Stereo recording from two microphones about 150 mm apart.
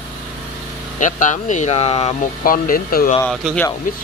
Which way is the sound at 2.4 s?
70° left (ahead or behind).